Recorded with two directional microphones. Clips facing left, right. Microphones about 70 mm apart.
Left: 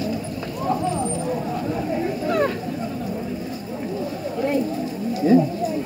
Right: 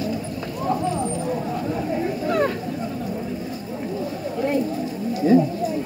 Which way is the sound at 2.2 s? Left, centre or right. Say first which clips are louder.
Even; right.